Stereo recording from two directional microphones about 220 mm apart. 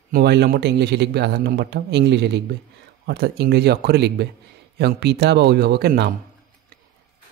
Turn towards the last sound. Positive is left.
turn(degrees=-50)  # may be behind; listen again after turning